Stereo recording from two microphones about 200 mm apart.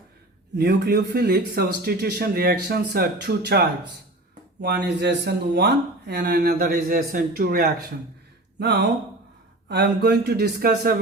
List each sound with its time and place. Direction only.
0.5 s speech: 55° right (ahead or behind)